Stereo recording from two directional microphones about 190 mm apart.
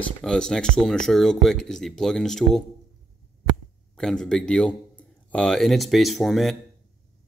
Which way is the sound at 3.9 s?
5° left (ahead or behind).